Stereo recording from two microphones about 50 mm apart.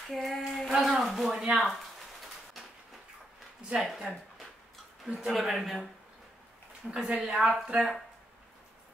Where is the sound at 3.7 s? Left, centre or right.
Centre.